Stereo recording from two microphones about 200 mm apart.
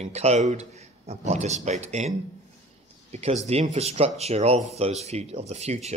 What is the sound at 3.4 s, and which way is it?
Speech, 35° right (ahead or behind).